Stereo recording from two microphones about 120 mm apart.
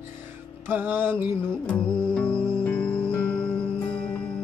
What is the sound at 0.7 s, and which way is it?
Music, 20° right (ahead or behind).